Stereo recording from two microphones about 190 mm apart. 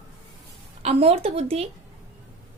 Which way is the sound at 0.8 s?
35° right (ahead or behind).